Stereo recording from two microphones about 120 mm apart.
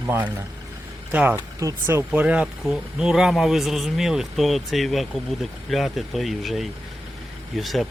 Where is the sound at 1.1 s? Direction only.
15° right (ahead or behind).